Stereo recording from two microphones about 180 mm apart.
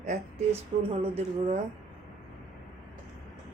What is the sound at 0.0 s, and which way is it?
A woman's voice, 45° right (ahead or behind).